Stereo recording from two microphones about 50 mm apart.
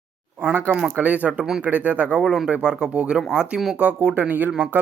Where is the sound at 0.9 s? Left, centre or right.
Right.